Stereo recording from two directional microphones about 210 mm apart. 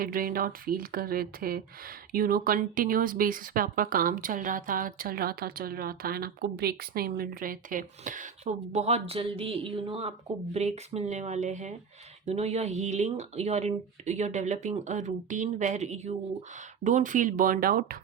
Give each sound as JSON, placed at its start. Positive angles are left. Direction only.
{"t": 0.0, "sound": "speech", "side_deg": -45}